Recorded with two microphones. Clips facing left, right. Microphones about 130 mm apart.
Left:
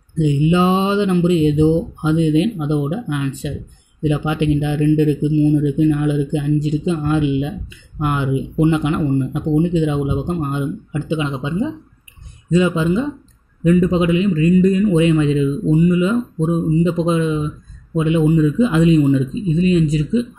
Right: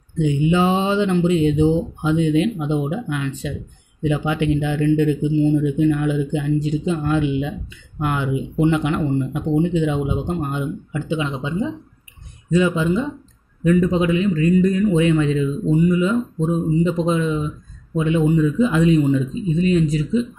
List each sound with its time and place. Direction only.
0.2 s a man's voice: 15° left (ahead or behind)